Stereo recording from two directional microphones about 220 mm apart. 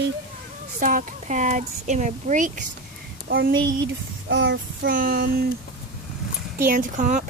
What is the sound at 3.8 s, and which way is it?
Child singing, 60° right (ahead or behind).